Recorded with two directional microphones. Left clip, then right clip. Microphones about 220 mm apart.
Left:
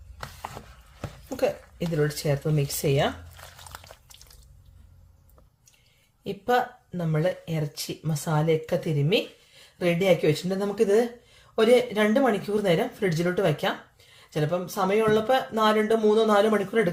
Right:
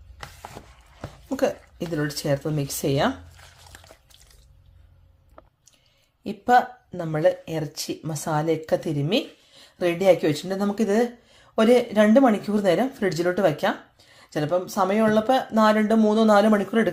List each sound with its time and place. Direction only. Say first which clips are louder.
2.0 s speech: right 1 dB; 35° right (ahead or behind)
6.2 s speech: right 5 dB; 35° right (ahead or behind)